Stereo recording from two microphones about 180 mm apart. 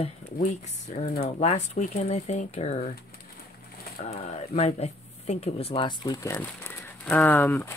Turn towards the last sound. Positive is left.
turn(degrees=15)  # may be behind; listen again after turning